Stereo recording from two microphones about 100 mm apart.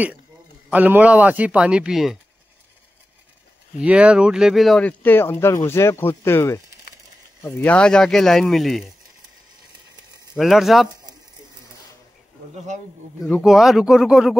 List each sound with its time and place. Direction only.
0.7 s speech: 15° right (ahead or behind)
3.8 s speech: 10° right (ahead or behind)
4.7 s speech: 15° left (ahead or behind); by 8.9 s centre (ahead or behind)
10.3 s speech: centre (ahead or behind)
13.2 s speech: centre (ahead or behind)